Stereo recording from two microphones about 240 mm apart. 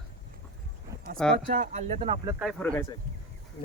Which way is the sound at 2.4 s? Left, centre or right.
Centre.